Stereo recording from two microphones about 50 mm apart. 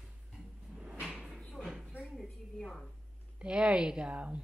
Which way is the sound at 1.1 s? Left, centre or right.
Centre.